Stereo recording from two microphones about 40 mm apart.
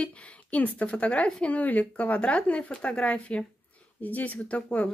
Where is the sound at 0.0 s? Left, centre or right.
Left.